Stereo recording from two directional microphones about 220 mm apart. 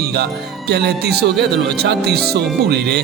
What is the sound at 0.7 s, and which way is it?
Speech, 50° right (ahead or behind).